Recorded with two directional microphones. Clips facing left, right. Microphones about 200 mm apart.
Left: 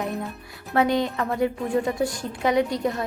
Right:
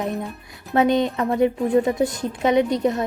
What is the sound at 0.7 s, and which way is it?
A woman's voice, 20° right (ahead or behind).